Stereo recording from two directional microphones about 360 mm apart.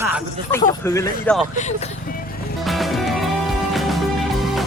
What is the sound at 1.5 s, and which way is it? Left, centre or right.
Speech, centre.